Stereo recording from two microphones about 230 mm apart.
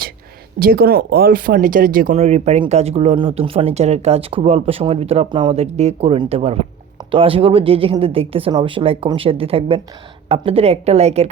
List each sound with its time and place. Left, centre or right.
0.6 s speech: right